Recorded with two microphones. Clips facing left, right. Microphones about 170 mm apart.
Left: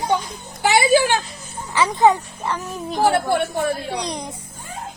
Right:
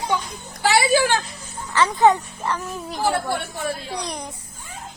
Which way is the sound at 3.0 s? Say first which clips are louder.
Left 5 dB; 55° left (ahead or behind).